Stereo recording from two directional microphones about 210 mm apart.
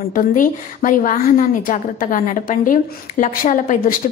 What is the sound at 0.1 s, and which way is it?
A woman's voice, 40° left (ahead or behind).